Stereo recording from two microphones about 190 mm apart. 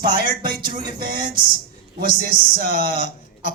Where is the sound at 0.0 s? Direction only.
50° right (ahead or behind).